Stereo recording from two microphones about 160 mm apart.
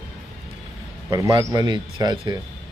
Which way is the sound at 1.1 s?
25° right (ahead or behind).